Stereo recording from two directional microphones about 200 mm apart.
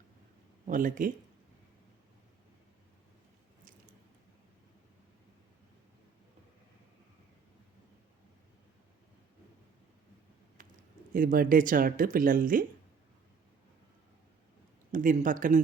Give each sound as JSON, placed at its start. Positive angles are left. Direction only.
{"t": 0.7, "sound": "speech", "side_deg": -40}
{"t": 10.6, "sound": "a sound", "side_deg": -40}
{"t": 11.1, "sound": "speech", "side_deg": -45}
{"t": 14.9, "sound": "speech", "side_deg": -40}